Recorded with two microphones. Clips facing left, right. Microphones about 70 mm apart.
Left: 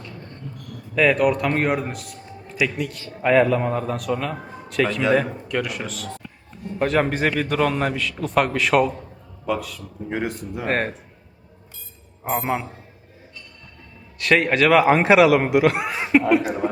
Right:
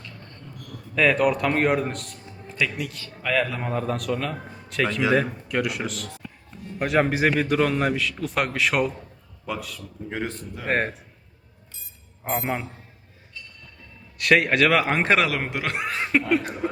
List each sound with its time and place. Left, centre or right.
0.0 s a sound: centre
0.9 s a man's voice: centre
3.2 s speech: left
3.5 s a man's voice: centre
10.2 s speech: centre
10.7 s a man's voice: centre
12.2 s a man's voice: centre
14.2 s a man's voice: centre
16.3 s a sound: centre